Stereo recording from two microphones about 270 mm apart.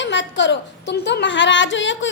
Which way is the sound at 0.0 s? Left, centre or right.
Left.